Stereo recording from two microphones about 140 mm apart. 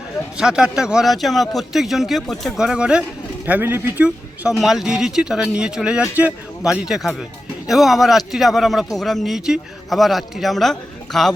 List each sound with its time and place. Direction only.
0.3 s a man's voice: 5° right (ahead or behind)